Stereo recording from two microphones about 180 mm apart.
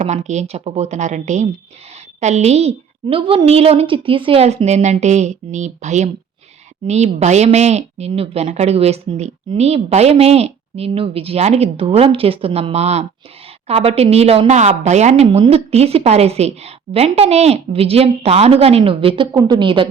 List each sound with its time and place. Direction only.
0.0 s a woman's voice: 40° right (ahead or behind)